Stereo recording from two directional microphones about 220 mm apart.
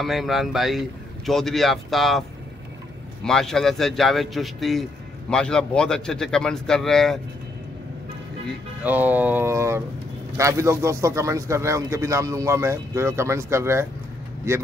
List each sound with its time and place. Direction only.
0.0 s speech: centre (ahead or behind)
3.3 s speech: centre (ahead or behind)
8.8 s a man's voice: 10° right (ahead or behind)